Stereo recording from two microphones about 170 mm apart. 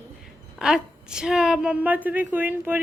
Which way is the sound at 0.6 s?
5° right (ahead or behind).